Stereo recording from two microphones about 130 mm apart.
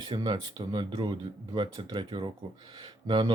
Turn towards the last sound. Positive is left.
turn(degrees=-35)  # may be behind; listen again after turning